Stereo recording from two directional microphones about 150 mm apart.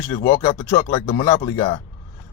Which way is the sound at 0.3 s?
30° left (ahead or behind).